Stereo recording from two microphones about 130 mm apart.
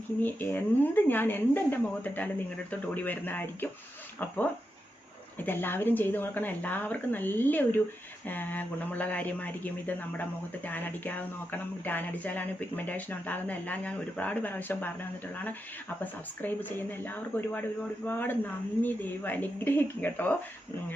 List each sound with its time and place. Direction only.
0.2 s speech: 15° left (ahead or behind)
5.4 s speech: 15° left (ahead or behind)
16.0 s speech: 15° left (ahead or behind)